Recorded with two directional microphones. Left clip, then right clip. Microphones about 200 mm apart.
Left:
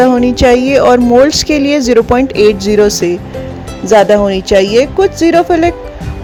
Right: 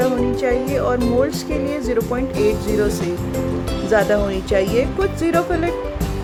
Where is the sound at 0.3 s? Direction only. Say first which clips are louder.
Left 12 dB; 40° left (ahead or behind).